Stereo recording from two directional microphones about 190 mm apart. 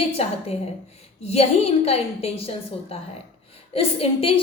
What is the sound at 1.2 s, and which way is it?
A woman's voice, 35° left (ahead or behind).